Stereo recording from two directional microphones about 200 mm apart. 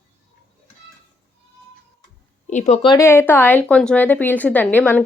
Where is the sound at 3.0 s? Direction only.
10° left (ahead or behind).